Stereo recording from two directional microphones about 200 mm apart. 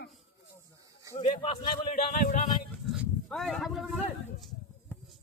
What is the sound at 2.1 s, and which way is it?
Speech, 40° left (ahead or behind).